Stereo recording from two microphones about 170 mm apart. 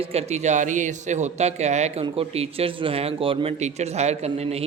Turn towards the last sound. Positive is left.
turn(degrees=-40)  # may be behind; listen again after turning